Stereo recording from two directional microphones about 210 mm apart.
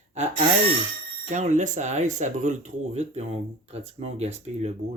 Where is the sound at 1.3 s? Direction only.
35° right (ahead or behind).